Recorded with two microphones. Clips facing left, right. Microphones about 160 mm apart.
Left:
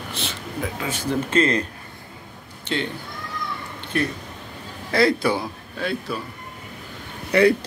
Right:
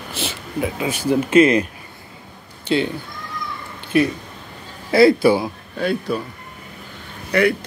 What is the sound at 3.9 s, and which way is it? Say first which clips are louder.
Speech: right 7 dB; 10° right (ahead or behind).